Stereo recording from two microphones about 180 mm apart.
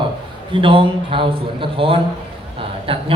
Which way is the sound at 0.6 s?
30° right (ahead or behind).